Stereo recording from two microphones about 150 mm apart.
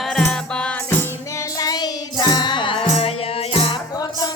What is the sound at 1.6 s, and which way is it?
Music, 25° left (ahead or behind).